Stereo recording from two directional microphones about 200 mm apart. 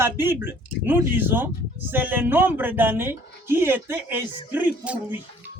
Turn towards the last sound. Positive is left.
turn(degrees=-10)  # may be behind; listen again after turning